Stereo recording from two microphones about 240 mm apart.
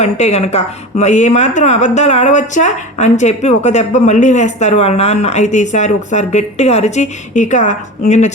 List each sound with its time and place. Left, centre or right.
0.0 s a woman's voice: left